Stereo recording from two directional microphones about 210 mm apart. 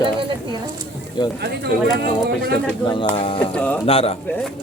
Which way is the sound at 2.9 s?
25° left (ahead or behind).